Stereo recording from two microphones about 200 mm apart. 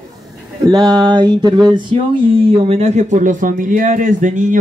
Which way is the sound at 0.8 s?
20° right (ahead or behind).